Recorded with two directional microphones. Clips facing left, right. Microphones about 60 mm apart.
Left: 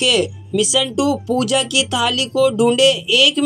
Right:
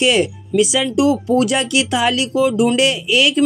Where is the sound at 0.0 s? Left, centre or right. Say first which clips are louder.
Right 2 dB; right.